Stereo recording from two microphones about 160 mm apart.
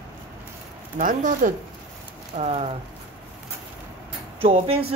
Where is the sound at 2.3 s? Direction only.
40° right (ahead or behind).